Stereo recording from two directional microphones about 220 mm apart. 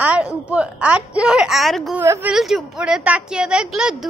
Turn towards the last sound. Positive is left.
turn(degrees=0)  # may be behind; listen again after turning